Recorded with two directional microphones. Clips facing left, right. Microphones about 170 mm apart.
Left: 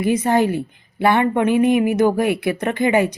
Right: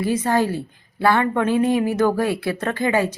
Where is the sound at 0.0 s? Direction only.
20° left (ahead or behind).